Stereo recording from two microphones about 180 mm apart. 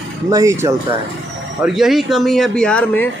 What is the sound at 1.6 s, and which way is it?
A man's voice, centre (ahead or behind).